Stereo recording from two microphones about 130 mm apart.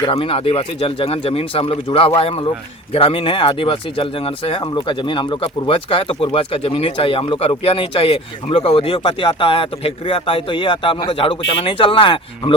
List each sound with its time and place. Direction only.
0.0 s speech: 45° left (ahead or behind)